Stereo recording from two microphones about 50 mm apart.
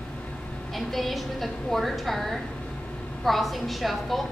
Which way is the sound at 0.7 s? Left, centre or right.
Centre.